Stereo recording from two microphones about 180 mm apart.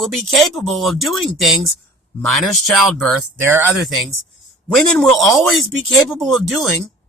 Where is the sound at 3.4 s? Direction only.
10° right (ahead or behind).